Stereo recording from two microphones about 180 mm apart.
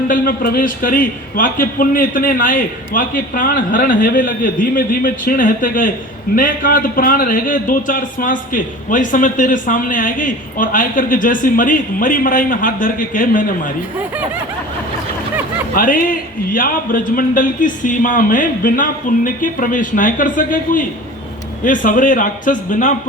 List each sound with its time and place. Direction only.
0.1 s a man's voice: 50° left (ahead or behind)
15.7 s a man's voice: 55° left (ahead or behind)